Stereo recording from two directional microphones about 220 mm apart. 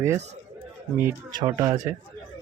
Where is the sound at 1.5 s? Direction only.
15° right (ahead or behind).